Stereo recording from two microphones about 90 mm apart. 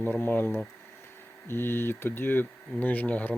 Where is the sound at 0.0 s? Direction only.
25° left (ahead or behind).